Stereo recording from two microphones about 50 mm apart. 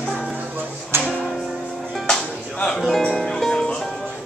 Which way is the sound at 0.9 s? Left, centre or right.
Right.